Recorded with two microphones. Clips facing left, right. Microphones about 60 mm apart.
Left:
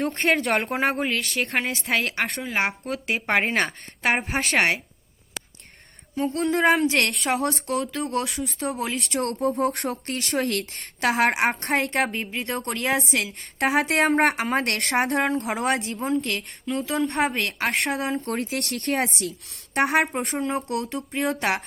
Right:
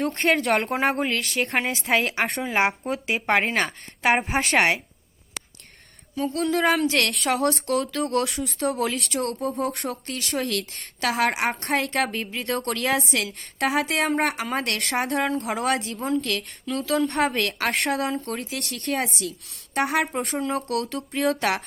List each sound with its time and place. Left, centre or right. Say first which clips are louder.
0.0 s speech: even; centre
6.3 s a woman's voice: left 1 dB; left
7.1 s speech: right 2 dB; centre
9.1 s a woman's voice: left 6 dB; left
11.8 s a woman's voice: left 1 dB; left; by 13.3 s centre
13.7 s a woman's voice: left 2 dB; left
15.4 s speech: even; centre
15.6 s a woman's voice: even; left
16.0 s speech: even; centre
18.2 s a woman's voice: left 3 dB; left
20.5 s speech: right 1 dB; centre